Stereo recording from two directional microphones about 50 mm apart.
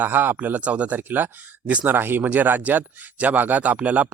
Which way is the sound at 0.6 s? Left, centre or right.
Right.